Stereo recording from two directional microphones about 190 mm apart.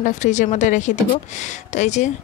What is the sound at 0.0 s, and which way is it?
Speech, 40° left (ahead or behind).